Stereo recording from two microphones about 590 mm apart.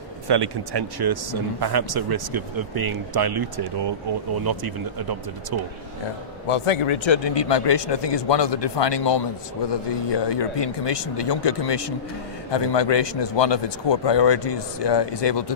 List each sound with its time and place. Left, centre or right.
0.3 s speech: right
6.5 s a man's voice: left